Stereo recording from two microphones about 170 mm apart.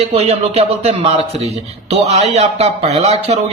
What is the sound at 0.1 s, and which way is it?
A man's voice, 35° right (ahead or behind).